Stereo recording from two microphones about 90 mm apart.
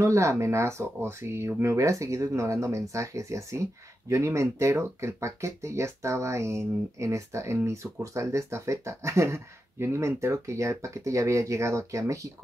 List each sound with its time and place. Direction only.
0.0 s speech: 35° right (ahead or behind)